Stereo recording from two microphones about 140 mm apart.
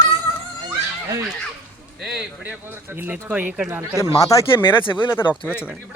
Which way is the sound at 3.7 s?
20° right (ahead or behind).